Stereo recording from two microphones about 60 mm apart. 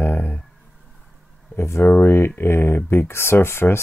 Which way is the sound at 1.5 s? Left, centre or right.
Left.